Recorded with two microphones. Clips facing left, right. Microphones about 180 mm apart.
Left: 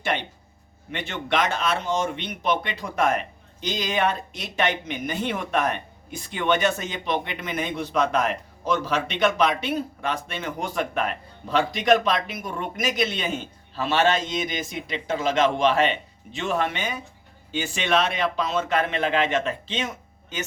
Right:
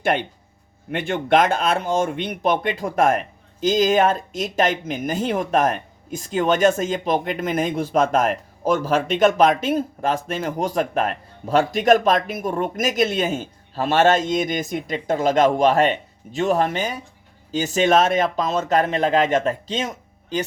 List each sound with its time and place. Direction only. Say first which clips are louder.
0.0 s speech: right 6 dB; 50° right (ahead or behind)